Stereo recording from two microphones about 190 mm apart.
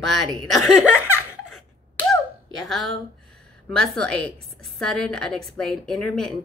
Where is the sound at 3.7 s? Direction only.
Centre (ahead or behind).